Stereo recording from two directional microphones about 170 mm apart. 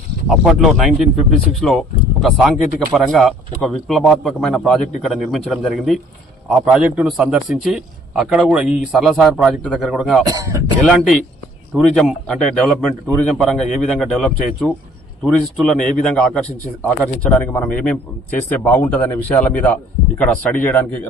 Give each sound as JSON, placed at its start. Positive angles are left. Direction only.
{"t": 0.3, "sound": "a man's voice", "side_deg": 0}
{"t": 10.2, "sound": "speech", "side_deg": -20}
{"t": 11.7, "sound": "a man's voice", "side_deg": 0}